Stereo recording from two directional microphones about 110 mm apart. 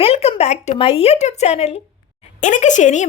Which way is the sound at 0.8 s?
60° left (ahead or behind).